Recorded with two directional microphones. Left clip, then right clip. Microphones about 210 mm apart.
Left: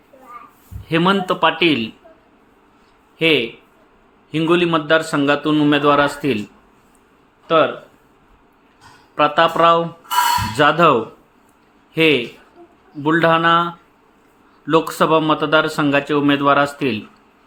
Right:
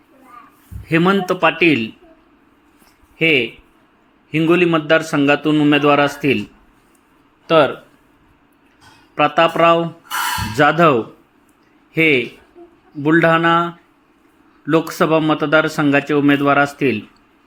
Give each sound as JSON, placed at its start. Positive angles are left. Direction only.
{"t": 0.9, "sound": "a man's voice", "side_deg": -10}
{"t": 3.2, "sound": "a man's voice", "side_deg": -10}
{"t": 7.4, "sound": "speech", "side_deg": -25}
{"t": 9.1, "sound": "a man's voice", "side_deg": -10}
{"t": 11.9, "sound": "a man's voice", "side_deg": -10}